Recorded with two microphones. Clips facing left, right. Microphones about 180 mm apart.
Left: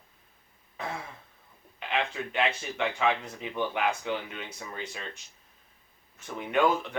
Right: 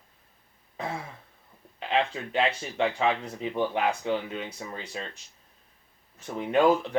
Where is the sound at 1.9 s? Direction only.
30° right (ahead or behind).